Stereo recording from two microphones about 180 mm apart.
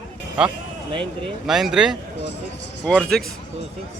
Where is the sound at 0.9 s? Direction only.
25° right (ahead or behind).